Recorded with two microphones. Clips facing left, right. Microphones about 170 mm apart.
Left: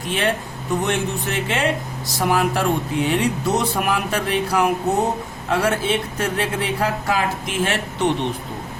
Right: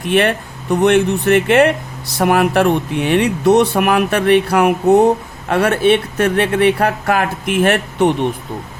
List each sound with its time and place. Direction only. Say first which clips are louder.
0.1 s speech: right 7 dB; 65° right (ahead or behind)